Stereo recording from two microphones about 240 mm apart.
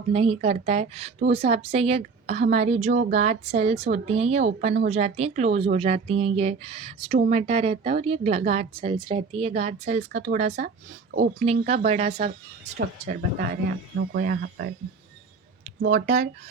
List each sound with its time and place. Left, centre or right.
0.1 s a woman's voice: right
15.9 s speech: right